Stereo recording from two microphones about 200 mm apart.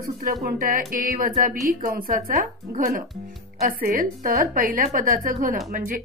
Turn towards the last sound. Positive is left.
turn(degrees=-40)  # may be behind; listen again after turning